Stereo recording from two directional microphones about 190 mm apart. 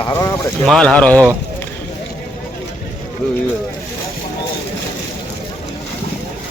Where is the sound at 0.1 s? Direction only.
15° left (ahead or behind).